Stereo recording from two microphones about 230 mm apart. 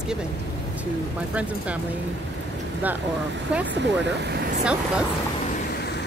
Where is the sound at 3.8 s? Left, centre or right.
Right.